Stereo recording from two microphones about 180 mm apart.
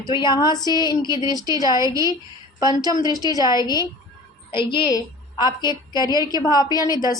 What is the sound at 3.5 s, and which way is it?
A woman's voice, 20° left (ahead or behind).